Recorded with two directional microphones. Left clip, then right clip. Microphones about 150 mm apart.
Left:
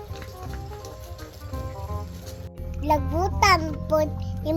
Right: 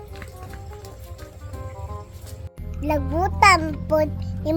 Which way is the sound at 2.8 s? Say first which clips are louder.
Left 1 dB; 20° right (ahead or behind).